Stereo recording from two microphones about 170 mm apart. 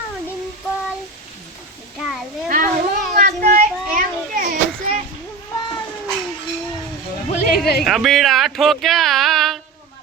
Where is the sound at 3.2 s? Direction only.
55° right (ahead or behind).